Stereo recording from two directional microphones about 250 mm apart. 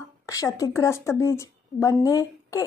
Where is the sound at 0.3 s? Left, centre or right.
Centre.